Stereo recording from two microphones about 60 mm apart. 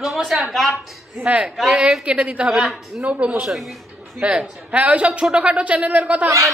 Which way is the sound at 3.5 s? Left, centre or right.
Centre.